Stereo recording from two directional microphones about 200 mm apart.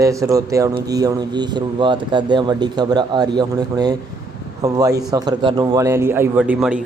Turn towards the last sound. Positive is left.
turn(degrees=-5)  # may be behind; listen again after turning